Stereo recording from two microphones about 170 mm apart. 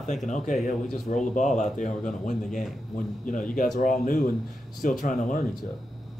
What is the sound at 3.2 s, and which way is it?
Speech, 50° left (ahead or behind).